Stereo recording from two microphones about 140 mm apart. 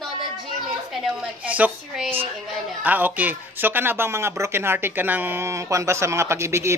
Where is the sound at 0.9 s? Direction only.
5° right (ahead or behind).